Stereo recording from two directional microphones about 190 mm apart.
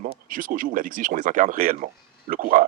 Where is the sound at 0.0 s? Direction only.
45° right (ahead or behind).